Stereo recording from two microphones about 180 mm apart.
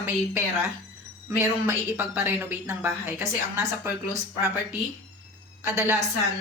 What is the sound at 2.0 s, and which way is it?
Speech, 10° right (ahead or behind).